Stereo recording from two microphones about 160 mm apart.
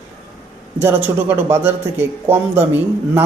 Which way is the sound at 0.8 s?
10° right (ahead or behind).